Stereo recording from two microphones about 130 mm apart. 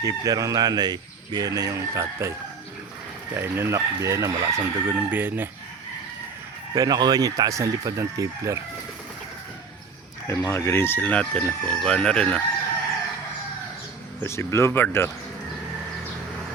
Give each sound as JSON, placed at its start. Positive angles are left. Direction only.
{"t": 0.0, "sound": "speech", "side_deg": -25}
{"t": 3.3, "sound": "speech", "side_deg": -20}
{"t": 6.7, "sound": "speech", "side_deg": -30}
{"t": 10.2, "sound": "speech", "side_deg": 20}
{"t": 14.3, "sound": "speech", "side_deg": 20}